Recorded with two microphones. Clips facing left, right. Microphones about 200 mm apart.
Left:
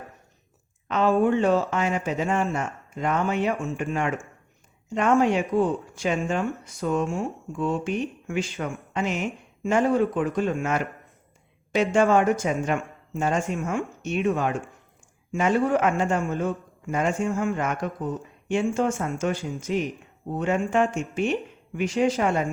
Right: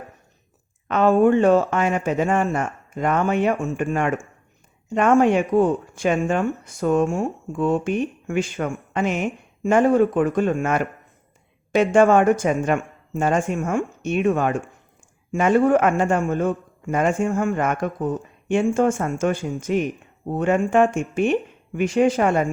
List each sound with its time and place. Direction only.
0.9 s a man's voice: 55° right (ahead or behind)